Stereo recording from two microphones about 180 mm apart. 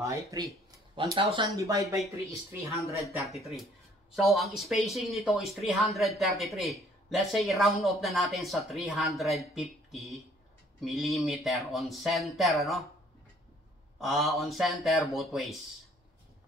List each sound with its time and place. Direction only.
0.0 s speech: 15° right (ahead or behind)
0.9 s speech: 30° right (ahead or behind)
3.2 s speech: centre (ahead or behind)
13.9 s speech: centre (ahead or behind)